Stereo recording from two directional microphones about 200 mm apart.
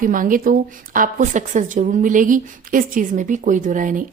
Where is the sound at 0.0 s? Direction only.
45° right (ahead or behind).